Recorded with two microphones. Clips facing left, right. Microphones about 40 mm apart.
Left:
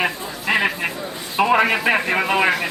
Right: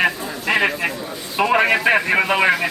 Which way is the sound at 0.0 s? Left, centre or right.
Centre.